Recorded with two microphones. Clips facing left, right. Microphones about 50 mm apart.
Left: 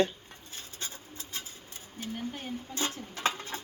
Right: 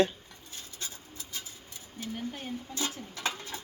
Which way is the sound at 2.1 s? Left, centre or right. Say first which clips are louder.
Even; centre.